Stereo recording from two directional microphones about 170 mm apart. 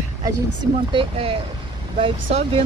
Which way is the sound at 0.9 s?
35° right (ahead or behind).